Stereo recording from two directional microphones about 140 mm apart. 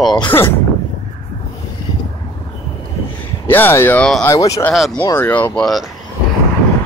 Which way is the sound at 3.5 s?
15° left (ahead or behind).